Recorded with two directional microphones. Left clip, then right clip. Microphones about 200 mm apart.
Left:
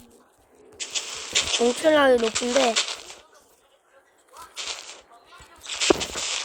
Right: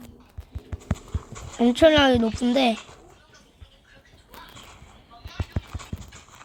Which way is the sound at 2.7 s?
30° left (ahead or behind).